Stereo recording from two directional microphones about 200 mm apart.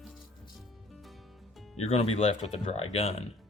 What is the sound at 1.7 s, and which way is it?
Speech, 30° left (ahead or behind).